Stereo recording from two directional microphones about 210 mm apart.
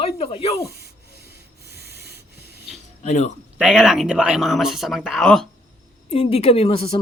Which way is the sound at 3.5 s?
5° right (ahead or behind).